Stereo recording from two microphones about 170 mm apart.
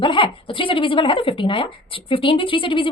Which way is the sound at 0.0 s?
30° left (ahead or behind).